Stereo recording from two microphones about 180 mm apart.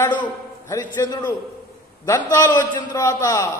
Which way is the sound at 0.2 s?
15° left (ahead or behind).